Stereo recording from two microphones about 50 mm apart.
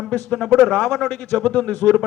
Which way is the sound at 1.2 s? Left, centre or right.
Left.